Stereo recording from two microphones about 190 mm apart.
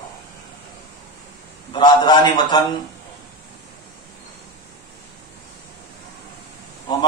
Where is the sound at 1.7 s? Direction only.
25° left (ahead or behind).